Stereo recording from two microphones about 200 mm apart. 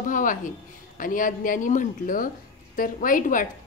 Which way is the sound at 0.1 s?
40° left (ahead or behind).